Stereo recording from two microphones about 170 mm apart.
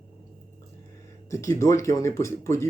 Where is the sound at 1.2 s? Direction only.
20° left (ahead or behind).